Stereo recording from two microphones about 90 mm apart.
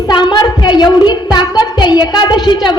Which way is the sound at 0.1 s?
55° left (ahead or behind).